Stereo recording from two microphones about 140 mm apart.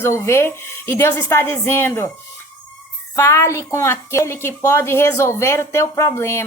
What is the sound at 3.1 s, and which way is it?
A woman's voice, 20° left (ahead or behind).